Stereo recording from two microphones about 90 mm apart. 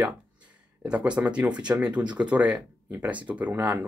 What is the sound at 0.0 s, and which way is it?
Speech, 15° right (ahead or behind).